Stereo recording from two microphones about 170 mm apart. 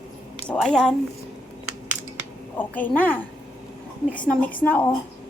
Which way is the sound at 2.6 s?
10° left (ahead or behind).